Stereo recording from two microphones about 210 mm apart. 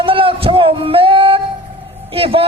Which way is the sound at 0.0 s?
25° right (ahead or behind).